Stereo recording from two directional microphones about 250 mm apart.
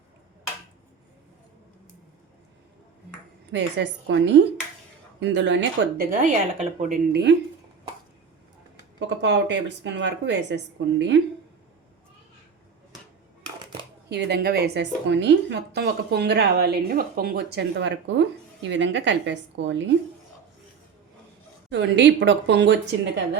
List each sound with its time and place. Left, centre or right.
3.5 s a woman's voice: right
9.0 s a woman's voice: right
14.1 s a woman's voice: right
21.7 s a woman's voice: right